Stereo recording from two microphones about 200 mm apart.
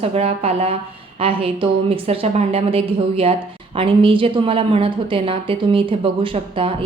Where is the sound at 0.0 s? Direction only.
30° right (ahead or behind).